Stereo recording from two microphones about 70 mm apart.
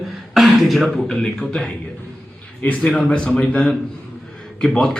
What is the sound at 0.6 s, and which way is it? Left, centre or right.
A man's voice, centre.